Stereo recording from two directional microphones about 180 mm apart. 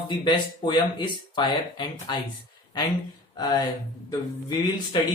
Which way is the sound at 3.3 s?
20° left (ahead or behind).